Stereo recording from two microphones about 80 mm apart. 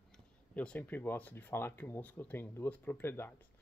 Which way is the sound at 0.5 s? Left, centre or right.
Left.